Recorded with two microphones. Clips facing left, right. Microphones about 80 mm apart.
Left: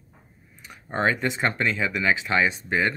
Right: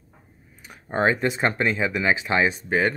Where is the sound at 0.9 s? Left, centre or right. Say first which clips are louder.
Right 2 dB; right.